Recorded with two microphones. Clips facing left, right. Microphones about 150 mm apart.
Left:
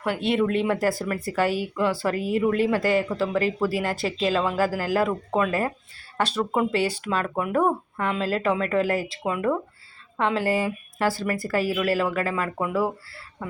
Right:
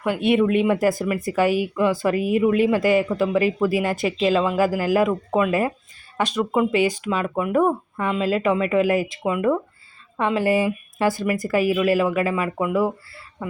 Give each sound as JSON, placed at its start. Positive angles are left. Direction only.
{"t": 0.2, "sound": "speech", "side_deg": -20}
{"t": 7.1, "sound": "speech", "side_deg": -5}
{"t": 9.2, "sound": "speech", "side_deg": -5}
{"t": 12.3, "sound": "speech", "side_deg": -10}